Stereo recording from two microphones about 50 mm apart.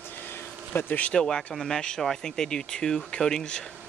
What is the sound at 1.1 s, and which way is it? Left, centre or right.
Speech, centre.